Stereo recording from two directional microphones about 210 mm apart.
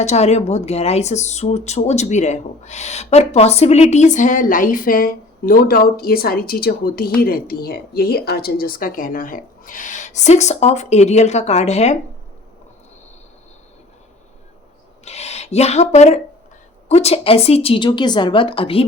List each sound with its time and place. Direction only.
0.0 s speech: 30° left (ahead or behind)
15.0 s a woman's voice: 30° left (ahead or behind)